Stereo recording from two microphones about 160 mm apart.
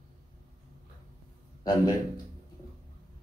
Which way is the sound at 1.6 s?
25° left (ahead or behind).